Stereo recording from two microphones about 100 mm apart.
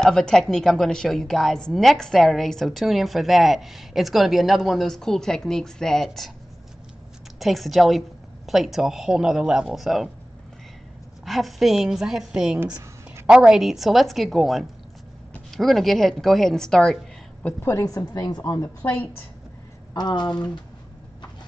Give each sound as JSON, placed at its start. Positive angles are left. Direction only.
{"t": 0.0, "sound": "a woman's voice", "side_deg": 5}
{"t": 7.3, "sound": "a woman's voice", "side_deg": 0}
{"t": 11.2, "sound": "a woman's voice", "side_deg": 0}
{"t": 17.4, "sound": "a woman's voice", "side_deg": 20}
{"t": 17.8, "sound": "a woman's voice", "side_deg": 35}
{"t": 19.9, "sound": "speech", "side_deg": 45}